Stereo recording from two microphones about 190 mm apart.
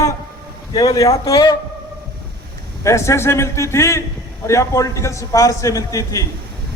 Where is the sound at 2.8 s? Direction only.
15° left (ahead or behind).